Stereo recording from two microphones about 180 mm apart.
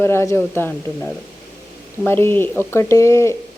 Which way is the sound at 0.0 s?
15° left (ahead or behind).